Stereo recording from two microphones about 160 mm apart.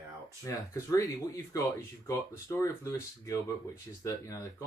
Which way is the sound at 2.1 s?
20° left (ahead or behind).